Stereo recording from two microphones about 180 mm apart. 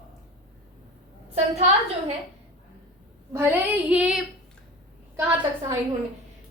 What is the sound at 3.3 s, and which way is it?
Child singing, 15° right (ahead or behind).